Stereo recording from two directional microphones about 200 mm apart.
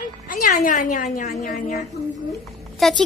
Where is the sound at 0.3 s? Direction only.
40° left (ahead or behind).